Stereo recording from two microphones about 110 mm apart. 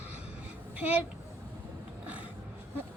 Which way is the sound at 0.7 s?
15° right (ahead or behind).